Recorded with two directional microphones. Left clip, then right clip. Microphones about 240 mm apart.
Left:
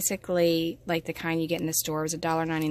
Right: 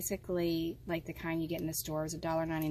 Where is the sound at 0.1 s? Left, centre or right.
Left.